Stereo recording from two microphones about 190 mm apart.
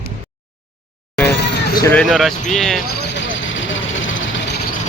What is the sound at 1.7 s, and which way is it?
Speech, 15° left (ahead or behind).